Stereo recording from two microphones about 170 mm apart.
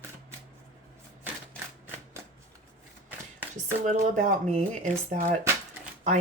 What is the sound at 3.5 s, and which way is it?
Speech, 45° right (ahead or behind).